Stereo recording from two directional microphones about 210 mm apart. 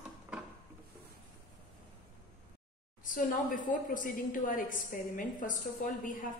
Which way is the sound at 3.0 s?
40° left (ahead or behind).